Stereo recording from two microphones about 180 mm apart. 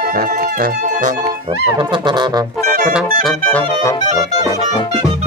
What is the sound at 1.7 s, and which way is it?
Brass instrument, 25° right (ahead or behind).